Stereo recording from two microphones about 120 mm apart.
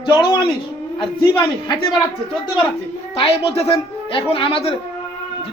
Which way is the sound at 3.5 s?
55° left (ahead or behind).